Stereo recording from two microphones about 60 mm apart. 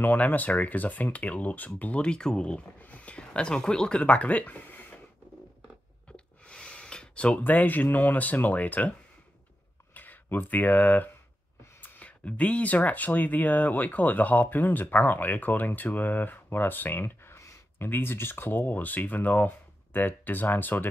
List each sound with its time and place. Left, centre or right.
0.0 s speech: left
6.1 s speech: centre
9.9 s speech: left